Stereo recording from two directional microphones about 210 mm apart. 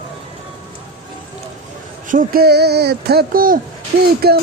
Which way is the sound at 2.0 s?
40° right (ahead or behind).